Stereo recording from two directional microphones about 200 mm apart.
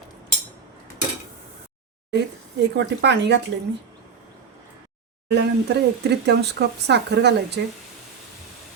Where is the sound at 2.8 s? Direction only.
60° right (ahead or behind).